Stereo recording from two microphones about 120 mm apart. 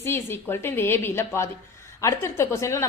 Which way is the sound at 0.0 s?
20° left (ahead or behind).